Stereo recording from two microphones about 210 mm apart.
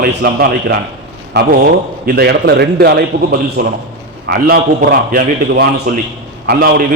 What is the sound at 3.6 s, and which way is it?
A man's voice, 40° right (ahead or behind).